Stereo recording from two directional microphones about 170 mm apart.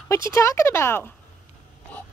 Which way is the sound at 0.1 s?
15° left (ahead or behind).